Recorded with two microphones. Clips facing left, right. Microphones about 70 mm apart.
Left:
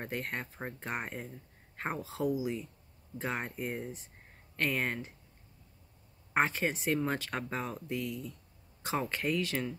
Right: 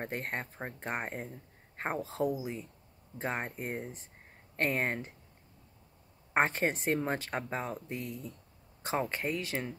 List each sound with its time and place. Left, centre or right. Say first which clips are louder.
0.0 s speech: right 1 dB; right
6.3 s speech: right 1 dB; right